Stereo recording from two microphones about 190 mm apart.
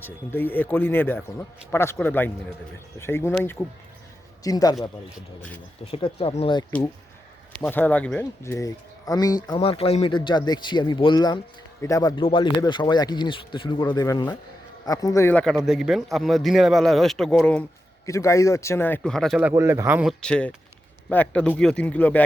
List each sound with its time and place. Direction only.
0.0 s speech: 10° left (ahead or behind)
5.0 s speech: 10° left (ahead or behind)
5.8 s speech: 30° left (ahead or behind)
7.6 s speech: 10° left (ahead or behind)
18.0 s speech: 15° left (ahead or behind)
19.4 s speech: 10° right (ahead or behind)
20.2 s speech: 5° left (ahead or behind)